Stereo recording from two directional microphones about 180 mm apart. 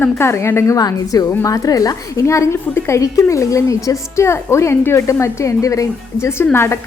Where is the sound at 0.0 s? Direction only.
15° left (ahead or behind).